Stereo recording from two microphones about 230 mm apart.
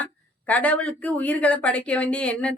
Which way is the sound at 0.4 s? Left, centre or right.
Centre.